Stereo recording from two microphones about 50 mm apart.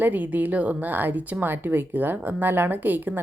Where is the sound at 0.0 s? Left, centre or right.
Right.